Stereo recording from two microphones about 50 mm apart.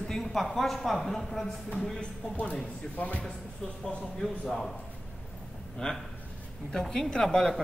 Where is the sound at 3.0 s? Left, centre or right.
Left.